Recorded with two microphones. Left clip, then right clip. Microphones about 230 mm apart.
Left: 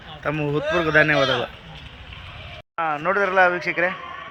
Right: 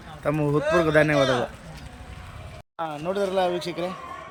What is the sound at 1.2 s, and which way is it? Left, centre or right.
Speech, left.